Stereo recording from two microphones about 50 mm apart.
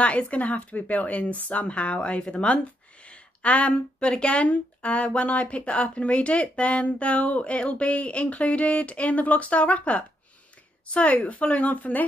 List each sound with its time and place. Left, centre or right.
0.0 s speech: left